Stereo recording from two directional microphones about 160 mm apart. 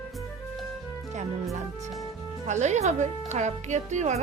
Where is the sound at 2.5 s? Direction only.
45° right (ahead or behind).